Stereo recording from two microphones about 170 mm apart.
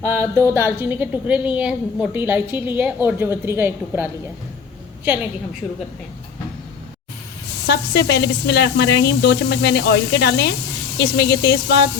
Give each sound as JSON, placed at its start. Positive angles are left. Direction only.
{"t": 0.0, "sound": "a woman's voice", "side_deg": -15}
{"t": 7.7, "sound": "speech", "side_deg": 80}